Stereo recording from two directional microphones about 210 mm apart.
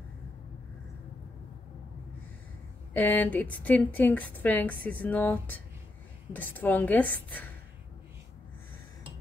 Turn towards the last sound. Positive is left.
turn(degrees=10)  # may be behind; listen again after turning